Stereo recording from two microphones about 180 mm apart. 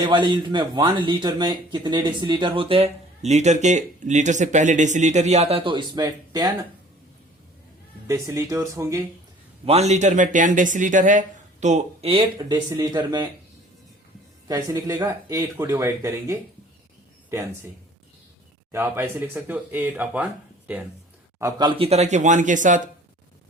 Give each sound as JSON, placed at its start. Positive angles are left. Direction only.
{"t": 0.0, "sound": "speech", "side_deg": -25}
{"t": 8.0, "sound": "speech", "side_deg": -20}
{"t": 9.6, "sound": "speech", "side_deg": -35}
{"t": 12.4, "sound": "speech", "side_deg": -20}
{"t": 14.4, "sound": "speech", "side_deg": -20}
{"t": 18.7, "sound": "speech", "side_deg": -15}
{"t": 21.3, "sound": "speech", "side_deg": -20}